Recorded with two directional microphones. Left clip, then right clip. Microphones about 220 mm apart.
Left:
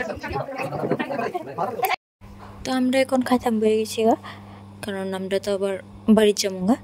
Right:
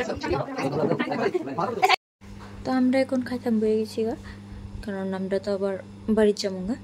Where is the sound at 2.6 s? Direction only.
30° left (ahead or behind).